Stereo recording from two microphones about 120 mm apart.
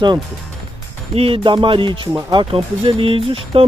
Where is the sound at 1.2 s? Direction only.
45° right (ahead or behind).